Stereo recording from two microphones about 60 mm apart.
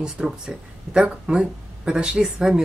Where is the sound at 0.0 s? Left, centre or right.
Centre.